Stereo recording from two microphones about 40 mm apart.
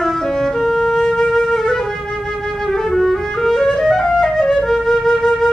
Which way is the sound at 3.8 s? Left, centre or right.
Centre.